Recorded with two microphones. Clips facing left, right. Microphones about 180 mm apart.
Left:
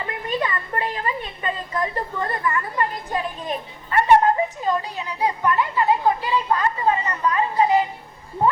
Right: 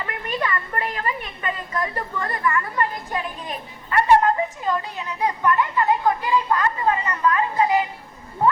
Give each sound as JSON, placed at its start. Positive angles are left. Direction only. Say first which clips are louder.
{"t": 0.0, "sound": "a woman's voice", "louder": "left 1 dB", "side_deg": 20}
{"t": 3.9, "sound": "children playing", "louder": "left 1 dB", "side_deg": 20}